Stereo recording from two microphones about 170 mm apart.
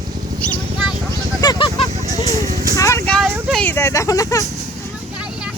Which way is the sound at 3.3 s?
10° right (ahead or behind).